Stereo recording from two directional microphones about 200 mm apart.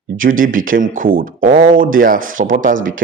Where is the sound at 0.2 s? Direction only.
45° right (ahead or behind).